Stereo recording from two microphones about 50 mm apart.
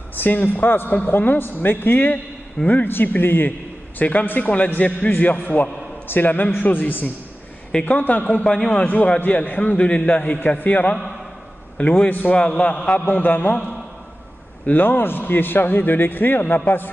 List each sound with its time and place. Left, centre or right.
0.1 s a man's voice: left
4.0 s a man's voice: left
8.5 s a man's voice: centre
8.7 s a man's voice: left
12.1 s a man's voice: left
12.4 s a man's voice: centre
13.1 s a man's voice: left
14.7 s a man's voice: left